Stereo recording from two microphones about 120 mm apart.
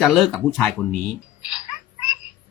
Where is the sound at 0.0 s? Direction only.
Centre (ahead or behind).